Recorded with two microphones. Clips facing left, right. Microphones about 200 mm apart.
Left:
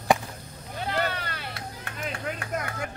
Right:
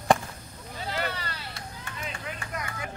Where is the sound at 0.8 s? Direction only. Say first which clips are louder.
Left 4 dB; 55° left (ahead or behind).